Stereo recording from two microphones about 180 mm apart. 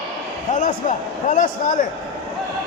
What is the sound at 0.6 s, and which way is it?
Speech, 45° left (ahead or behind).